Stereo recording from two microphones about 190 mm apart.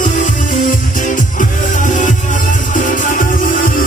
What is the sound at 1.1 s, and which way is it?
Music, 45° left (ahead or behind).